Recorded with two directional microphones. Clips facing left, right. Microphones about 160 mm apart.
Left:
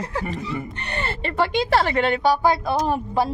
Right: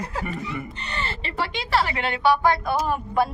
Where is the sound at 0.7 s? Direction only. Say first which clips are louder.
Left 3 dB; 55° left (ahead or behind).